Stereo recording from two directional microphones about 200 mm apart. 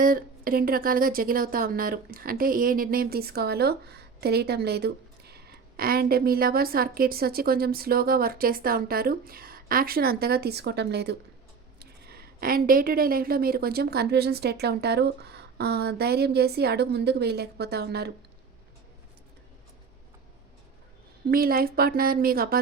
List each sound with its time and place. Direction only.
0.0 s speech: 45° right (ahead or behind)
21.2 s speech: 45° right (ahead or behind)